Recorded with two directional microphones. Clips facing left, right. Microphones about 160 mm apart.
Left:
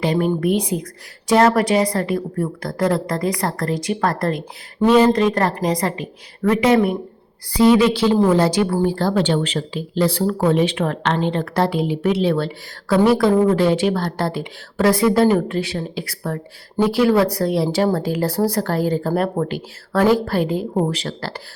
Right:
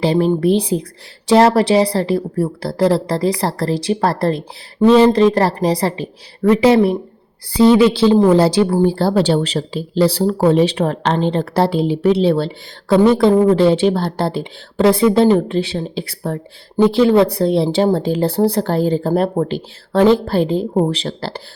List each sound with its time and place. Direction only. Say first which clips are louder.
0.0 s a woman's voice: right 4 dB; 30° right (ahead or behind)